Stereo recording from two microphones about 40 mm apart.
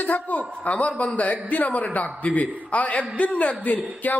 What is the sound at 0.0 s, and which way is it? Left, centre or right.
A man's voice, left.